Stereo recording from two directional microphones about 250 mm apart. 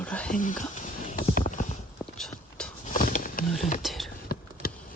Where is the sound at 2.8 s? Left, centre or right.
Left.